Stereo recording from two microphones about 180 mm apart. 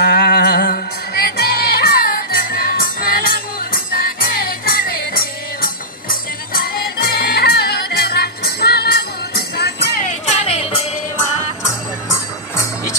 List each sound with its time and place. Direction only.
0.0 s music: 65° left (ahead or behind)
10.0 s music: 35° left (ahead or behind)